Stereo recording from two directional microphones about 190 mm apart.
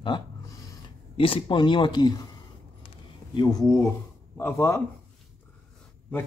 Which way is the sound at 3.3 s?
25° left (ahead or behind).